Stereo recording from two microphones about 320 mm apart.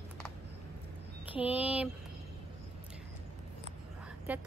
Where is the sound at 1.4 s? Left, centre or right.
Centre.